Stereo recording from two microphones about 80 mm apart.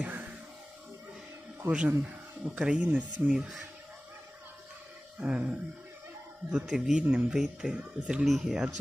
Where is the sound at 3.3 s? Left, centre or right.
Centre.